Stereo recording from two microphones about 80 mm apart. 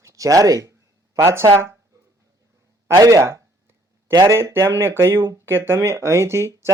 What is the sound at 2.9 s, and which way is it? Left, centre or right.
Speech, right.